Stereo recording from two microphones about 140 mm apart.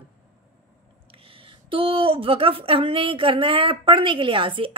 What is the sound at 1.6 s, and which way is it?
A woman's voice, 40° right (ahead or behind).